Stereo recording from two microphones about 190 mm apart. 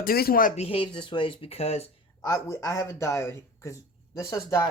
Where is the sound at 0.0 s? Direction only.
50° left (ahead or behind).